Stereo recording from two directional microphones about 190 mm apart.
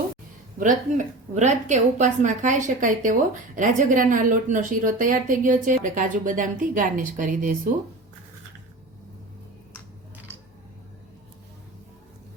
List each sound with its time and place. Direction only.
0.6 s a woman's voice: 40° right (ahead or behind)